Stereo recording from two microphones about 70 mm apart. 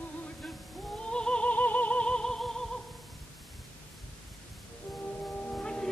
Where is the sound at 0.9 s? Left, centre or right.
Centre.